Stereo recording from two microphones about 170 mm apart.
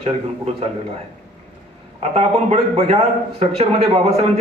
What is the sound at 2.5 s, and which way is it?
A man's voice, 35° right (ahead or behind).